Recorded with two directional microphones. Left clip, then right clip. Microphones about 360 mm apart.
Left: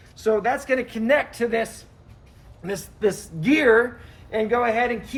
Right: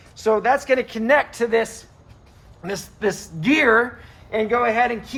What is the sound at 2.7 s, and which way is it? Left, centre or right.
Speech, centre.